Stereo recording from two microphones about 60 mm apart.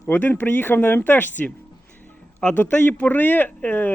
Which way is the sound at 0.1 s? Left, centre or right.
Left.